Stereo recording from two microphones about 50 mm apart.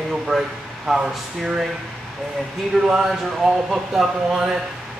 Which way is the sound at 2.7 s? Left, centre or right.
Centre.